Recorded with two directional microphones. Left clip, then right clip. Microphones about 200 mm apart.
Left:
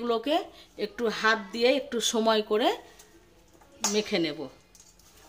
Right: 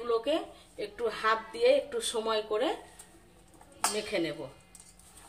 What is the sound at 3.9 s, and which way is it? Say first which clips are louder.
Speech: left 7 dB; 50° left (ahead or behind).